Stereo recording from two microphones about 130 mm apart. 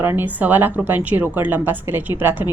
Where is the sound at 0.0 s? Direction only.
15° right (ahead or behind).